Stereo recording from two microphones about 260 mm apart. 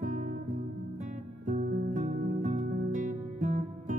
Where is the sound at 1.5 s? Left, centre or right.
Right.